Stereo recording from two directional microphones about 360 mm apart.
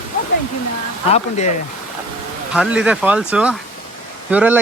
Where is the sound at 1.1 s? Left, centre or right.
Centre.